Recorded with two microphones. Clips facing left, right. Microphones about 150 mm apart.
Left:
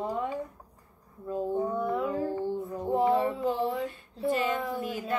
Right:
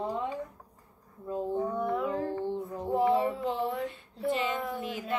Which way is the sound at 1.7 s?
5° left (ahead or behind).